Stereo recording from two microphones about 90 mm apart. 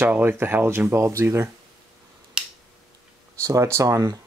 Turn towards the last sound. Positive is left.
turn(degrees=-40)  # may be behind; listen again after turning